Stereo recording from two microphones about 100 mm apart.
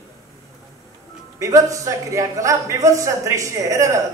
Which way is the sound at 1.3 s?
30° right (ahead or behind).